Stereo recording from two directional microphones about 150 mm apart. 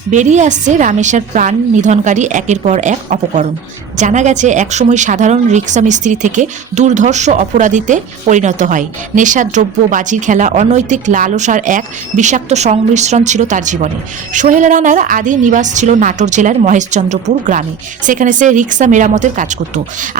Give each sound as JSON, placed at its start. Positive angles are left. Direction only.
{"t": 0.1, "sound": "a woman's voice", "side_deg": -55}